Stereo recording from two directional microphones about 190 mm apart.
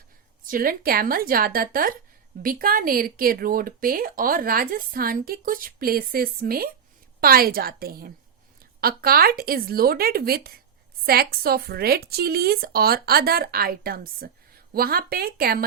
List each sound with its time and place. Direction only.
0.4 s speech: 50° right (ahead or behind)